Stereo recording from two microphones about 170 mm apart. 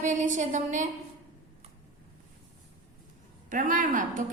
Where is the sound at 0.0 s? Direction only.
45° right (ahead or behind).